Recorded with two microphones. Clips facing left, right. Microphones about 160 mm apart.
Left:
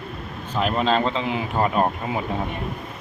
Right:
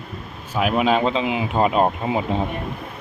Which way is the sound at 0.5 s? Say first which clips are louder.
Right 2 dB; 5° right (ahead or behind).